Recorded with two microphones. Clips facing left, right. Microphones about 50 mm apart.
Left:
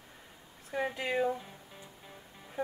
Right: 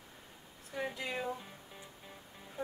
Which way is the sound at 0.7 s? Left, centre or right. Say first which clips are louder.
Left 6 dB; left.